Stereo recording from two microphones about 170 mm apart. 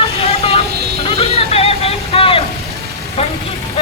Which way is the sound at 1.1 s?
35° left (ahead or behind).